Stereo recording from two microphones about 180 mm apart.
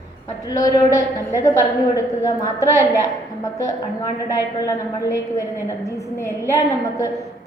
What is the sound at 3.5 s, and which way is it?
A woman's voice, 20° left (ahead or behind).